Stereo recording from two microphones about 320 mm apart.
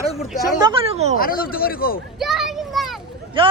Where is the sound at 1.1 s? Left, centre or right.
Left.